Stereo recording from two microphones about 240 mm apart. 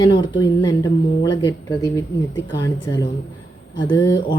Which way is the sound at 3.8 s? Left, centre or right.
Centre.